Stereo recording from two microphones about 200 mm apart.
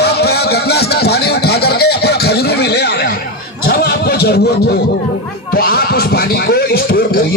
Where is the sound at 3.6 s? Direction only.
50° left (ahead or behind).